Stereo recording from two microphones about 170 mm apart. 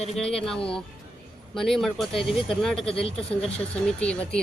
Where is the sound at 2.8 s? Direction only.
35° left (ahead or behind).